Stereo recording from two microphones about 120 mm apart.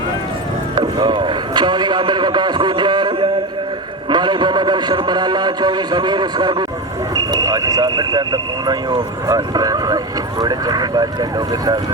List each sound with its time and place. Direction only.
0.8 s vehicle: 40° right (ahead or behind)
4.1 s a man's voice: 40° right (ahead or behind)